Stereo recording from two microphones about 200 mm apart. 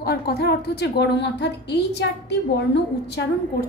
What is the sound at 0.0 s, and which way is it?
A woman's voice, 55° left (ahead or behind).